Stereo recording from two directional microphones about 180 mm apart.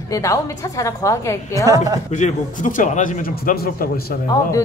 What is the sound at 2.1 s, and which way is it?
Speech, 45° left (ahead or behind).